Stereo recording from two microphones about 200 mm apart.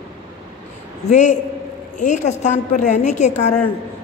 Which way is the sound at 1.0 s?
35° left (ahead or behind).